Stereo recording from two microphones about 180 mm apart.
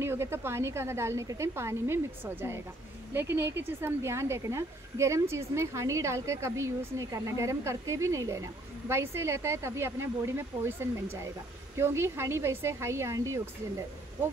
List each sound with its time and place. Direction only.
0.0 s a woman's voice: 15° right (ahead or behind)